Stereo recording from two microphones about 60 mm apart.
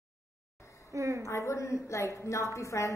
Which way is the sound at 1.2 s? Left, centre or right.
Left.